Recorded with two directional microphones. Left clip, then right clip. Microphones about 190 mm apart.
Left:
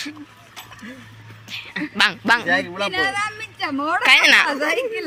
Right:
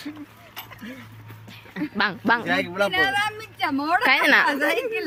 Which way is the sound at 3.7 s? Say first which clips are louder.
Left 5 dB; 25° right (ahead or behind).